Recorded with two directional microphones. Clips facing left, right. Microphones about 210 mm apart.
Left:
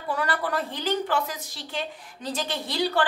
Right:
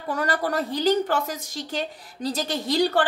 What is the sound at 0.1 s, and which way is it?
A woman's voice, 45° right (ahead or behind).